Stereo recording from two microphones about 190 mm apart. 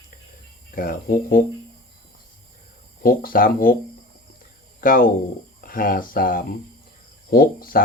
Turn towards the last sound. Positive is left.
turn(degrees=50)  # may be behind; listen again after turning